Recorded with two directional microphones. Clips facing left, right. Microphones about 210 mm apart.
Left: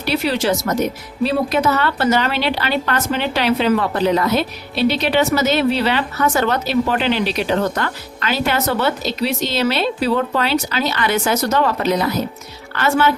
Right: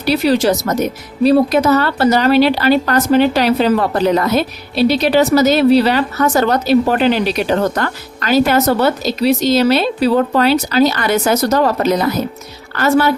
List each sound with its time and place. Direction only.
0.0 s a woman's voice: 40° right (ahead or behind)